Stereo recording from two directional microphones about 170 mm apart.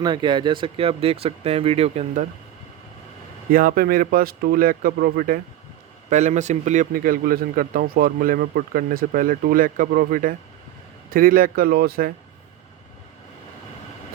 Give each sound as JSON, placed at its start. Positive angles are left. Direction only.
{"t": 0.0, "sound": "speech", "side_deg": -25}
{"t": 3.5, "sound": "a man's voice", "side_deg": -55}
{"t": 6.1, "sound": "a man's voice", "side_deg": -45}